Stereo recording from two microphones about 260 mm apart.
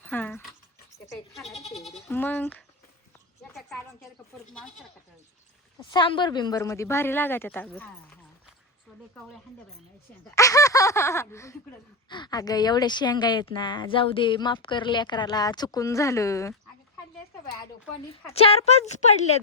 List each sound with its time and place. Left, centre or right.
0.0 s a sound: centre
1.3 s speech: centre
5.9 s speech: centre
10.3 s speech: centre
18.3 s speech: left